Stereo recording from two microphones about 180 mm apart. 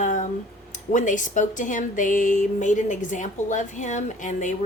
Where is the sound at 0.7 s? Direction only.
45° left (ahead or behind).